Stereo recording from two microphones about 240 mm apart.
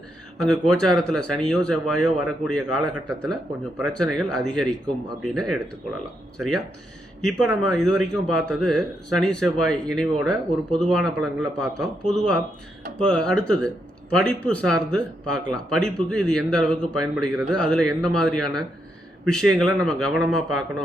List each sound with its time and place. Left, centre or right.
0.4 s a man's voice: centre
7.2 s a man's voice: centre